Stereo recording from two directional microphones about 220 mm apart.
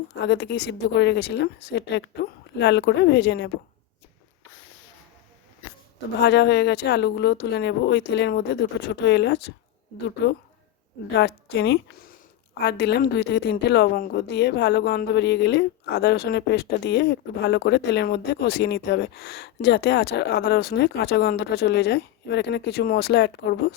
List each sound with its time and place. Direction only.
0.2 s a woman's voice: 50° left (ahead or behind)
6.1 s a woman's voice: 50° left (ahead or behind)
11.1 s a woman's voice: 50° left (ahead or behind)